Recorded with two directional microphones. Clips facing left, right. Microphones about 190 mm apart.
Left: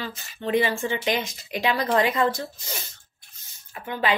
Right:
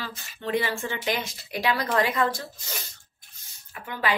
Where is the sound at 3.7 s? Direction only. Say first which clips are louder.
Left 2 dB; 25° left (ahead or behind).